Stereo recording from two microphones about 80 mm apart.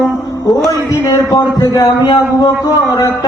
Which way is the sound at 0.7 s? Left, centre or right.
Left.